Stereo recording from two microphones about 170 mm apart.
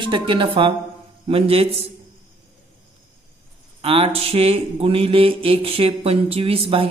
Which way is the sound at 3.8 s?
35° right (ahead or behind).